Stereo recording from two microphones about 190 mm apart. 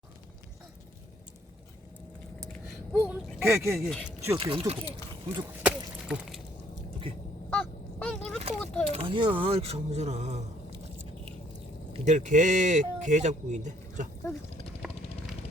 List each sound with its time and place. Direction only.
2.5 s a sound: 10° left (ahead or behind)
3.1 s speech: 10° right (ahead or behind)
3.8 s speech: centre (ahead or behind)
4.4 s speech: 30° right (ahead or behind)
5.5 s a sound: 5° right (ahead or behind)
7.5 s honk: 5° left (ahead or behind)
8.5 s a sound: 5° left (ahead or behind)
8.9 s speech: 30° right (ahead or behind)
11.9 s speech: 40° right (ahead or behind)